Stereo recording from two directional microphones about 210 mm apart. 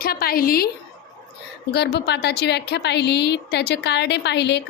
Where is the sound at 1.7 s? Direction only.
50° left (ahead or behind).